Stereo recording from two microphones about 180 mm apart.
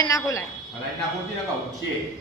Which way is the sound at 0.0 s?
20° left (ahead or behind).